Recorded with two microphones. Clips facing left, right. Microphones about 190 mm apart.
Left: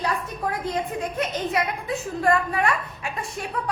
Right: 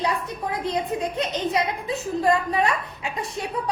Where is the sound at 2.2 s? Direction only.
20° right (ahead or behind).